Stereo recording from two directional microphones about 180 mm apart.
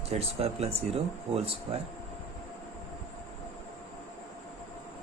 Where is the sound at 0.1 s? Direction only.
35° right (ahead or behind).